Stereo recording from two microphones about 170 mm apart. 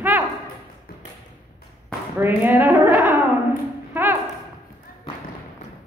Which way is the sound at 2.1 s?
10° right (ahead or behind).